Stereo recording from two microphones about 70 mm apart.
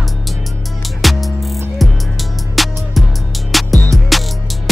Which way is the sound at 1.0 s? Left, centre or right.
Centre.